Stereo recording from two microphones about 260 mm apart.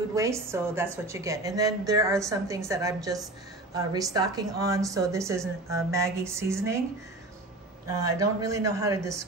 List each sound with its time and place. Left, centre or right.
0.1 s a woman's voice: centre
8.2 s a woman's voice: centre